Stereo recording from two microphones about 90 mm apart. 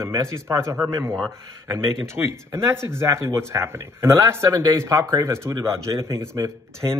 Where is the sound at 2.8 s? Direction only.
30° right (ahead or behind).